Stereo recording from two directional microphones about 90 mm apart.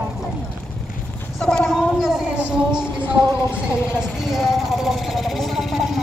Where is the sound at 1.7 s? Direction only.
5° right (ahead or behind).